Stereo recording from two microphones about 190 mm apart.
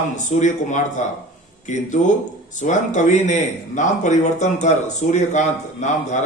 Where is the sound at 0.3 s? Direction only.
40° left (ahead or behind).